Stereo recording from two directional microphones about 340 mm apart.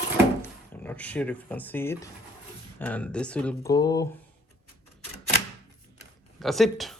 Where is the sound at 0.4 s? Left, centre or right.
Centre.